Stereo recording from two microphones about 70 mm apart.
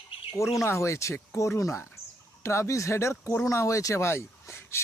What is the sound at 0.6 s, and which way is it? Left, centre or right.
Speech, left.